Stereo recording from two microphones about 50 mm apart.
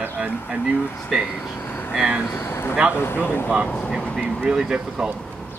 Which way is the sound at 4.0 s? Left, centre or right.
Left.